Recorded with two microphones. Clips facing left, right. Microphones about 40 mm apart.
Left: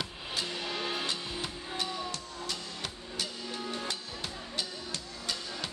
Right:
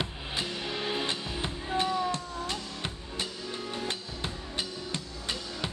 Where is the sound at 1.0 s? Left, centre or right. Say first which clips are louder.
Right 3 dB; right.